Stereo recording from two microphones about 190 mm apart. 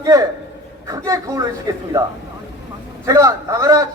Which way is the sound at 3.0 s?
15° right (ahead or behind).